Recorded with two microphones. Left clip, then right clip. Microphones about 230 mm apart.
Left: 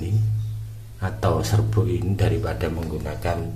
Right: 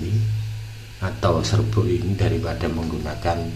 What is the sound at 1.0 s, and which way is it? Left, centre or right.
Speech, centre.